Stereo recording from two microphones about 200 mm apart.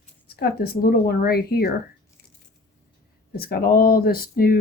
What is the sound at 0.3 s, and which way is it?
Speech, 50° left (ahead or behind).